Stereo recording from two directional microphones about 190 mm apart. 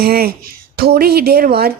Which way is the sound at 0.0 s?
55° right (ahead or behind).